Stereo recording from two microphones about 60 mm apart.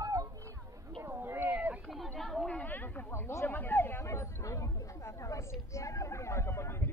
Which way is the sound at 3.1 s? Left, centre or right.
Left.